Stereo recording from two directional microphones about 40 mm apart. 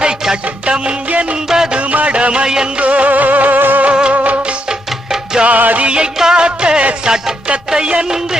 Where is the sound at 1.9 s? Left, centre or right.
Right.